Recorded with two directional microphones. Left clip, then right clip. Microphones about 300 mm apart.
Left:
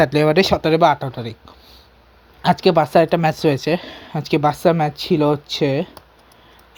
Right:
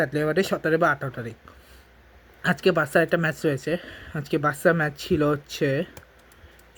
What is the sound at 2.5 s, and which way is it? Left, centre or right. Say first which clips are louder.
Speech: left 6 dB; centre.